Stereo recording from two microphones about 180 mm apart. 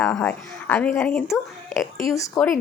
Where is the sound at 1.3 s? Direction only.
15° left (ahead or behind).